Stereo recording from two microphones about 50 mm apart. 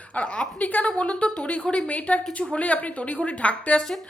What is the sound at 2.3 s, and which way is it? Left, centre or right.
Speech, centre.